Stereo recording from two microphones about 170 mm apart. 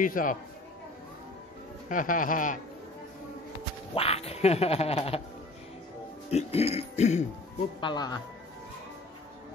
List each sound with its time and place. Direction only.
0.0 s a man's voice: 50° left (ahead or behind)
1.9 s a man's voice: 50° left (ahead or behind)
3.9 s quack: 35° left (ahead or behind)
6.3 s quack: 35° left (ahead or behind)
7.8 s speech: 25° left (ahead or behind)